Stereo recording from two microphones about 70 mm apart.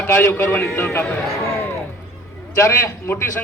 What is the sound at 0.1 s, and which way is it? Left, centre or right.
Speech, left.